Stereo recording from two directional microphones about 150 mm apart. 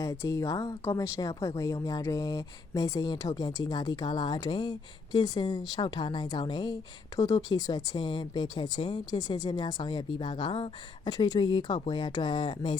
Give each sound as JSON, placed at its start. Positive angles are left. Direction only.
{"t": 0.0, "sound": "speech", "side_deg": 20}